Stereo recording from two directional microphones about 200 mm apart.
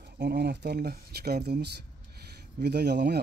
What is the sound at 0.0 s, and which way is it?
Speech, 55° right (ahead or behind).